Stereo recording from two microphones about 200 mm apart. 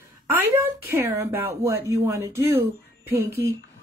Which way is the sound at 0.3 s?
10° right (ahead or behind).